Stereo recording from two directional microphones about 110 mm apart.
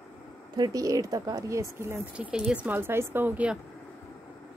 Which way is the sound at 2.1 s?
10° right (ahead or behind).